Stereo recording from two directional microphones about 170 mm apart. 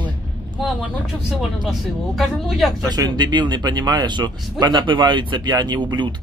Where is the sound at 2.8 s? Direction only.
25° right (ahead or behind).